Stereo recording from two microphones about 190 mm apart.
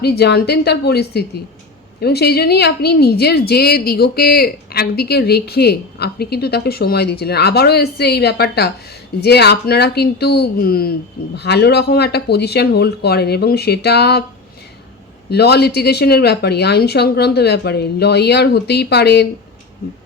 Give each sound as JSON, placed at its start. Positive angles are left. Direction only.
{"t": 0.0, "sound": "a woman's voice", "side_deg": 60}
{"t": 15.3, "sound": "a woman's voice", "side_deg": 60}